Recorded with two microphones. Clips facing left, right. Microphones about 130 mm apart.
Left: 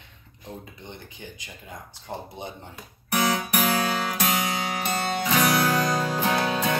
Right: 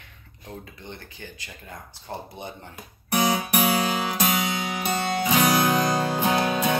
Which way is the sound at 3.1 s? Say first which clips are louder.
Right 1 dB; 15° right (ahead or behind).